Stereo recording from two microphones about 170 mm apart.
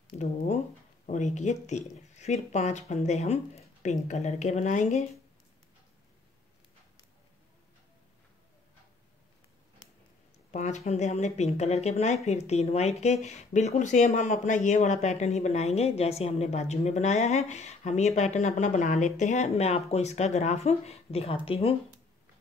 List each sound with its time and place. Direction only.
0.1 s a sound: 45° left (ahead or behind)
1.0 s speech: 45° left (ahead or behind)
10.5 s speech: 45° left (ahead or behind)